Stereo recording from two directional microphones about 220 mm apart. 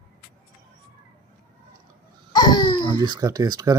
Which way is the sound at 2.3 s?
20° left (ahead or behind).